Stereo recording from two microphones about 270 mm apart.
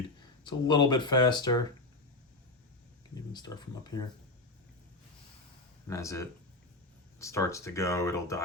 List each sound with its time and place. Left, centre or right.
0.4 s speech: centre
3.3 s speech: centre
5.9 s speech: centre